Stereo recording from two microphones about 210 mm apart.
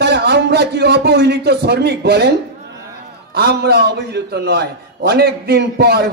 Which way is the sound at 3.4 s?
50° right (ahead or behind).